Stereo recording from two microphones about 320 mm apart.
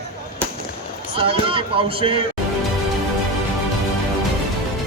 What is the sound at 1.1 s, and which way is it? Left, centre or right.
Speech, centre.